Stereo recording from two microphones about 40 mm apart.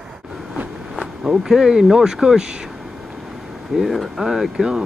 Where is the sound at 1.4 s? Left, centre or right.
Centre.